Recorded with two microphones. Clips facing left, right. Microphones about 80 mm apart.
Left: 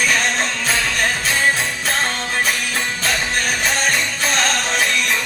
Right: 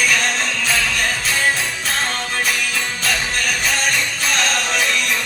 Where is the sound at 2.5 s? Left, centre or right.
Left.